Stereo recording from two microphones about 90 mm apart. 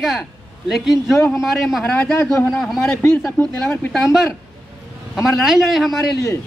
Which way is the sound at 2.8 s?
25° left (ahead or behind).